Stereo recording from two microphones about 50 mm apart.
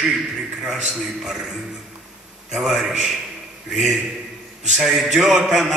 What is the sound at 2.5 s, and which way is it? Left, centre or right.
A man's voice, centre.